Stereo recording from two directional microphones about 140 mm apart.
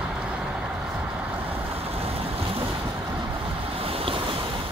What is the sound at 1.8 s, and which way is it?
Waves, 45° right (ahead or behind).